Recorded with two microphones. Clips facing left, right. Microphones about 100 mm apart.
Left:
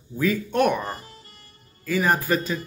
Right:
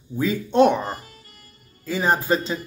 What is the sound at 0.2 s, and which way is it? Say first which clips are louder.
Speech: right 4 dB; 25° right (ahead or behind).